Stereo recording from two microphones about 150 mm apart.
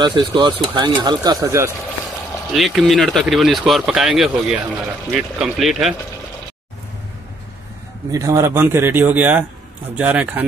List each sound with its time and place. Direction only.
0.0 s speech: 30° right (ahead or behind)
2.5 s speech: centre (ahead or behind)
8.1 s speech: 20° right (ahead or behind)